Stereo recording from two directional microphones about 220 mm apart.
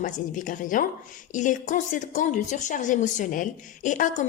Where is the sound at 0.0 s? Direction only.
35° left (ahead or behind).